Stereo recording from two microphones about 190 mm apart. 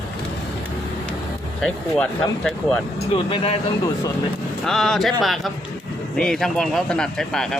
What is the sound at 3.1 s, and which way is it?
Speech, 30° left (ahead or behind).